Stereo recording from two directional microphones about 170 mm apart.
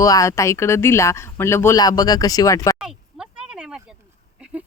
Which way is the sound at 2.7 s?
5° right (ahead or behind).